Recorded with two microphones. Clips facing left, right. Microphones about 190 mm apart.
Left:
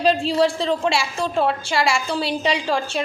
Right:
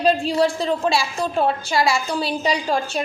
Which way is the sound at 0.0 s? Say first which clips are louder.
Even; 30° left (ahead or behind).